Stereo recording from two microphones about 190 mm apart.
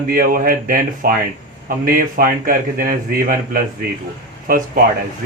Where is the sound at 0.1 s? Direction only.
50° right (ahead or behind).